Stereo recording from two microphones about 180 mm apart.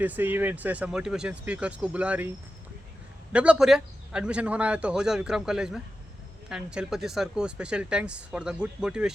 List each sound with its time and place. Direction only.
0.0 s speech: 10° right (ahead or behind)
3.3 s speech: 5° right (ahead or behind)